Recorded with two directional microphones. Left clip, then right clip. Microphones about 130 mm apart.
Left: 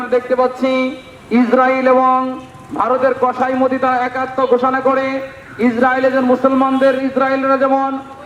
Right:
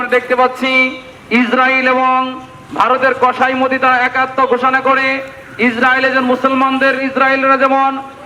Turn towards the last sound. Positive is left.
turn(degrees=-30)  # may be behind; listen again after turning